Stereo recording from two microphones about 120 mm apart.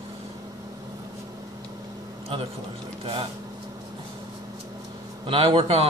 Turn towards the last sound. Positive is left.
turn(degrees=-50)  # may be behind; listen again after turning